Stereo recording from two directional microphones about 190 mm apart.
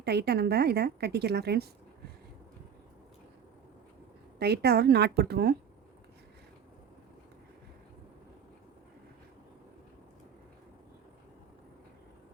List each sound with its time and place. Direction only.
0.0 s a woman's voice: 60° right (ahead or behind)
4.4 s a woman's voice: 55° right (ahead or behind)